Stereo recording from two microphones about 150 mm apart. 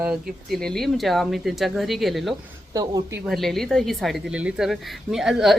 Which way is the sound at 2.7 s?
25° right (ahead or behind).